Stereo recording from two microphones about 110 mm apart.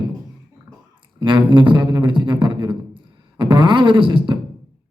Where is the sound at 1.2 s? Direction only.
45° right (ahead or behind).